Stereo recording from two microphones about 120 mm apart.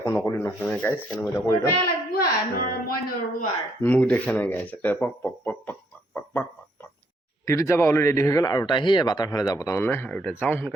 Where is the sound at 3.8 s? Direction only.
10° left (ahead or behind).